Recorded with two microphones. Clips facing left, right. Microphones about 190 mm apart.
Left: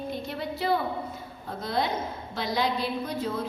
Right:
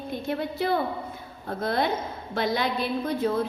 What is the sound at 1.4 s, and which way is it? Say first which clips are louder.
A woman's voice: right 3 dB; 55° right (ahead or behind).